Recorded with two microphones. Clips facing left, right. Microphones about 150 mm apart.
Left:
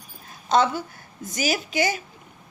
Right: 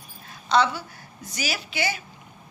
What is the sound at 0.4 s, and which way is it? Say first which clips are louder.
A woman's voice: left 1 dB; 45° left (ahead or behind).